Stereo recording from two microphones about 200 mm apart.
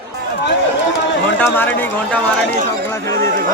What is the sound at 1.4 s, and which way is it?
Speech, 10° left (ahead or behind).